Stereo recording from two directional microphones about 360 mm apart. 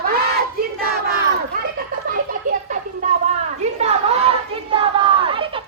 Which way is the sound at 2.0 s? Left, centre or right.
Right.